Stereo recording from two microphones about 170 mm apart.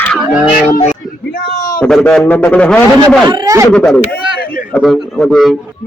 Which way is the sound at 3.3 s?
25° right (ahead or behind).